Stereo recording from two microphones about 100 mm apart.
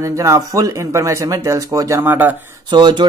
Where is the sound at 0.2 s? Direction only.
30° right (ahead or behind).